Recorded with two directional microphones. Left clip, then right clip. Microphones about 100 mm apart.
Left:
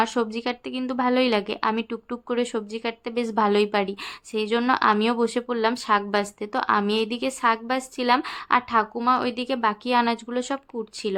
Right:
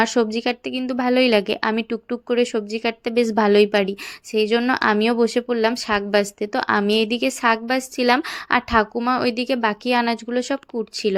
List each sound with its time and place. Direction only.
0.0 s a woman's voice: 30° right (ahead or behind)
2.7 s speech: 40° right (ahead or behind)